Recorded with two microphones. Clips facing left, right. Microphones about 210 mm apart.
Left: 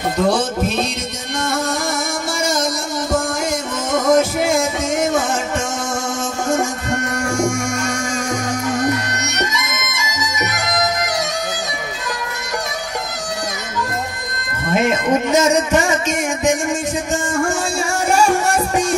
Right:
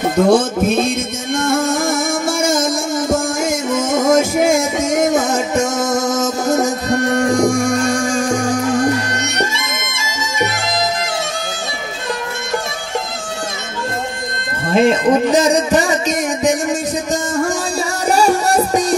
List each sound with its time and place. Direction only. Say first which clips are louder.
0.3 s music: right 5 dB; 50° right (ahead or behind); by 11.1 s 30° right (ahead or behind)
14.7 s music: right 4 dB; 30° right (ahead or behind)